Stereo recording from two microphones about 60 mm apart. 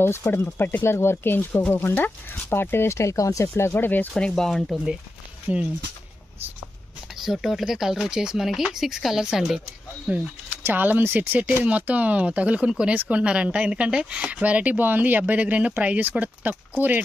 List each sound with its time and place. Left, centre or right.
0.2 s speech: left
4.1 s speech: centre
5.5 s speech: right
7.2 s speech: centre
10.0 s speech: right